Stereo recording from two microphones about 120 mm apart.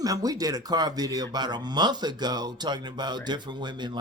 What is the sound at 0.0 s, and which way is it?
Speech, 30° right (ahead or behind).